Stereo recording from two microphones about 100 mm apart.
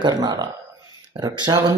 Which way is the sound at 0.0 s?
45° right (ahead or behind).